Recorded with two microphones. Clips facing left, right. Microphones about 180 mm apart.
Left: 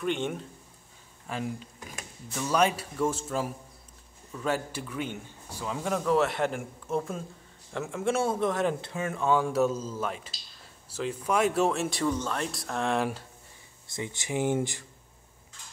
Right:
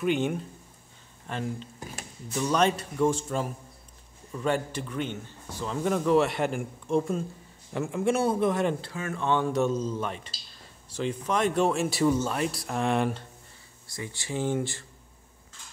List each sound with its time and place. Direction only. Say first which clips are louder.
0.0 s a man's voice: right 4 dB; 5° right (ahead or behind)
8.8 s speech: left 1 dB; 20° left (ahead or behind)
9.2 s speech: left 1 dB; 5° left (ahead or behind)
13.8 s speech: left 2 dB; 20° left (ahead or behind)